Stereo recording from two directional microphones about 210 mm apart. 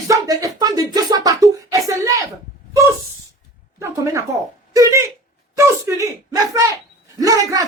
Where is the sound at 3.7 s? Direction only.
15° right (ahead or behind).